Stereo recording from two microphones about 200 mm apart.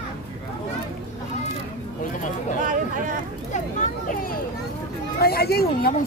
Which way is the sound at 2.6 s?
40° right (ahead or behind).